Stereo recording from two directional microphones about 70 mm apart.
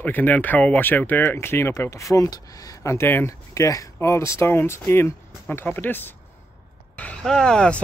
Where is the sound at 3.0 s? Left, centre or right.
Left.